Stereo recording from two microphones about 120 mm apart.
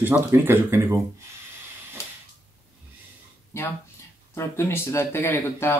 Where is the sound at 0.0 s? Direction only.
15° right (ahead or behind).